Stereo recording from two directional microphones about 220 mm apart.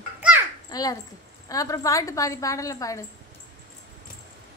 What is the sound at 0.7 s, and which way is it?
A woman's voice, 15° left (ahead or behind).